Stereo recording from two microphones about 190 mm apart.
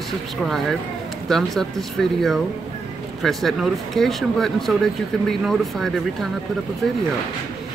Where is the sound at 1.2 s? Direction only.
Centre (ahead or behind).